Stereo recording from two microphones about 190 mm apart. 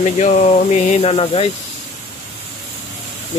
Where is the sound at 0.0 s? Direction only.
35° left (ahead or behind).